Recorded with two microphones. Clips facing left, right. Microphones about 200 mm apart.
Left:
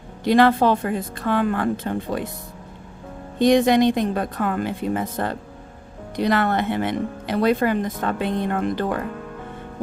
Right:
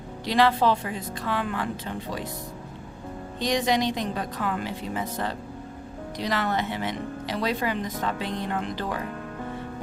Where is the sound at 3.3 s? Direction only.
55° left (ahead or behind).